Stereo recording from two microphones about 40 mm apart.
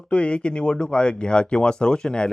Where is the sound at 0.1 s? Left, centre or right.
Left.